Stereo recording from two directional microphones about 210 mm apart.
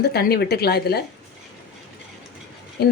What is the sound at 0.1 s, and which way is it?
Speech, 50° left (ahead or behind).